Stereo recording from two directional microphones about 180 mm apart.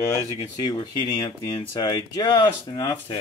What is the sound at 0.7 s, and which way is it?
Speech, 25° left (ahead or behind).